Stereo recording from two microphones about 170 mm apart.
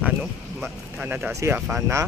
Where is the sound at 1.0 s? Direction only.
5° right (ahead or behind).